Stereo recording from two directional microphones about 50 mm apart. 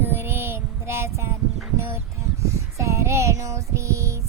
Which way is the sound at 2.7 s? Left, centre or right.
Right.